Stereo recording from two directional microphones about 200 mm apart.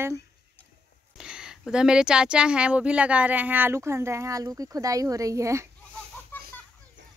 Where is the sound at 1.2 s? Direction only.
5° right (ahead or behind).